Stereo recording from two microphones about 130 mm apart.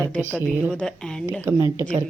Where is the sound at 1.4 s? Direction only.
20° right (ahead or behind).